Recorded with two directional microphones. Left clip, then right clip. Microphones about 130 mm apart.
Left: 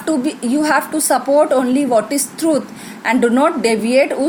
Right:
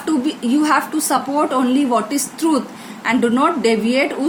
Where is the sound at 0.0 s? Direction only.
45° left (ahead or behind).